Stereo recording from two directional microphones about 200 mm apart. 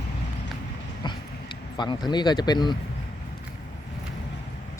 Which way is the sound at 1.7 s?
20° left (ahead or behind).